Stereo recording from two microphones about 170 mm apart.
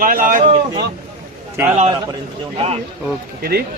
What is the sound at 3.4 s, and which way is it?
Speech, 60° right (ahead or behind).